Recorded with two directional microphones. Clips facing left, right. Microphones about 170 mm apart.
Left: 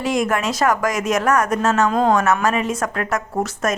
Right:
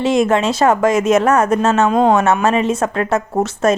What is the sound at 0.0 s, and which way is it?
Speech, 25° right (ahead or behind).